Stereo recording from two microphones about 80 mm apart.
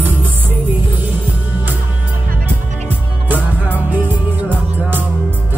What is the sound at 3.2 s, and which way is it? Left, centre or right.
Music, right.